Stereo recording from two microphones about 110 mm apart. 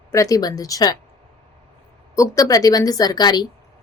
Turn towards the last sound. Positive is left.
turn(degrees=35)  # may be behind; listen again after turning